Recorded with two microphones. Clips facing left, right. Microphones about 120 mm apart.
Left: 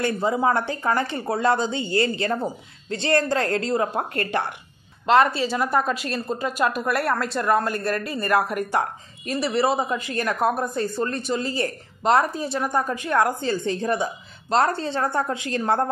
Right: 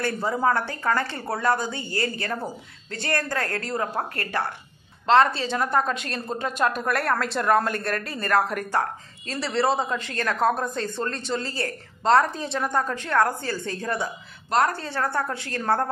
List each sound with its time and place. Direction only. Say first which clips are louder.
0.0 s speech: left 2 dB; 15° left (ahead or behind)
5.0 s speech: left 1 dB; 10° left (ahead or behind)